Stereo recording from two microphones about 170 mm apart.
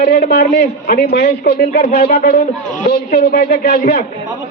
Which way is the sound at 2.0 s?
70° left (ahead or behind).